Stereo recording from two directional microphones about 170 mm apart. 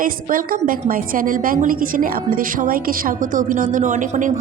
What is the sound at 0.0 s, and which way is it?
A woman's voice, 55° right (ahead or behind).